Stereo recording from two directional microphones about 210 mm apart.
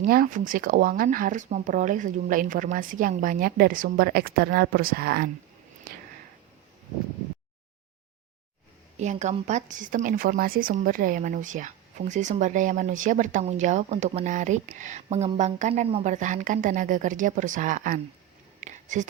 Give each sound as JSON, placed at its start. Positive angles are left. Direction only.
{"t": 0.0, "sound": "speech", "side_deg": -40}
{"t": 9.0, "sound": "speech", "side_deg": -35}
{"t": 18.6, "sound": "a sound", "side_deg": -35}